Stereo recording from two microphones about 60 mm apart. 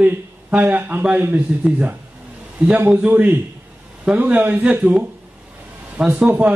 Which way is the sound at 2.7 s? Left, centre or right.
Right.